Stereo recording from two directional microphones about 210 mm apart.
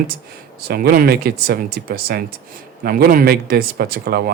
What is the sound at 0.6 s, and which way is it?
Speech, 45° right (ahead or behind).